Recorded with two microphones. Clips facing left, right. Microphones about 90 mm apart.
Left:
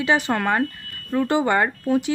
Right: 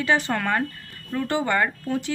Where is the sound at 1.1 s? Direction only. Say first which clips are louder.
Left 4 dB; 25° left (ahead or behind).